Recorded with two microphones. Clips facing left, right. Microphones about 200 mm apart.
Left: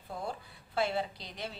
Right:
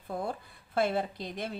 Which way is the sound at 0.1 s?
50° right (ahead or behind).